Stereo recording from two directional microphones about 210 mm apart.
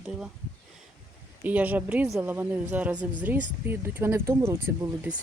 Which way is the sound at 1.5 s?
10° right (ahead or behind).